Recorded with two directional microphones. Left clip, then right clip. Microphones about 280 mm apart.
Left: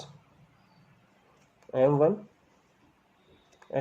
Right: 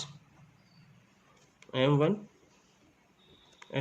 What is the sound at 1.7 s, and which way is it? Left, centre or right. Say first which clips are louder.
Speech: left 5 dB; right.